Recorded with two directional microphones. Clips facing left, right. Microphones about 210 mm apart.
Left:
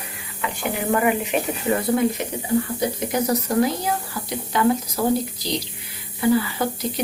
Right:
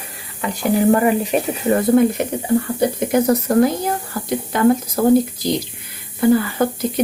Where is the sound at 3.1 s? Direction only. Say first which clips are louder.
Right 6 dB; 55° right (ahead or behind).